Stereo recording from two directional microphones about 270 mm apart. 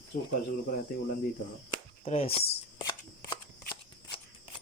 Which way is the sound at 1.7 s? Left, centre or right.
Left.